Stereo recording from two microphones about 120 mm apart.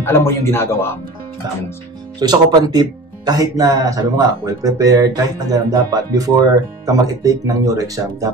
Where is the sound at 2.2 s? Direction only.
35° right (ahead or behind).